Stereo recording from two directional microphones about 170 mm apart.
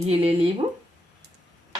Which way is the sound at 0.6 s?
20° right (ahead or behind).